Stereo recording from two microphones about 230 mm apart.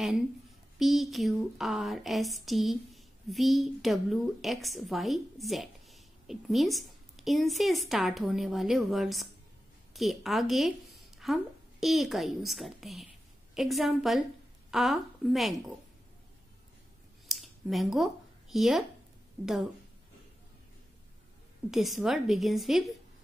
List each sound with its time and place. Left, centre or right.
0.7 s a woman's voice: centre
17.3 s a sound: centre
19.4 s speech: centre
21.6 s speech: centre